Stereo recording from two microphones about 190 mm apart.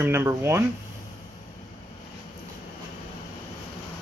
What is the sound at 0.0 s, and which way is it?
Speech, 15° right (ahead or behind).